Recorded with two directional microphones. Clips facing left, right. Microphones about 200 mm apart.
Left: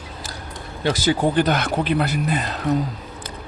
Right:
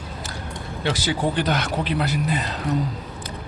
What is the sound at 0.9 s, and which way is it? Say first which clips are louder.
Speech: left 4 dB; 45° left (ahead or behind).